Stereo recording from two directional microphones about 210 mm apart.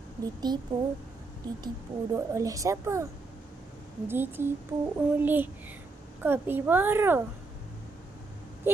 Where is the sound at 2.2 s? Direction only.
15° right (ahead or behind).